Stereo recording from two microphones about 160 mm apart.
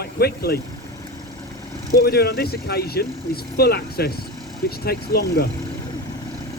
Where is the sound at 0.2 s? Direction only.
75° left (ahead or behind).